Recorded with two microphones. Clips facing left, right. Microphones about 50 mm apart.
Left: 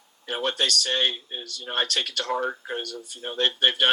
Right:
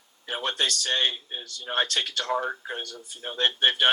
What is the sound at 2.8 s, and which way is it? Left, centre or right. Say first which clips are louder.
Speech: left 3 dB; right.